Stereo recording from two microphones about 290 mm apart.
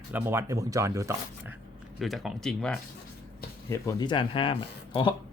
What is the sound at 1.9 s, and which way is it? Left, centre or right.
Speech, centre.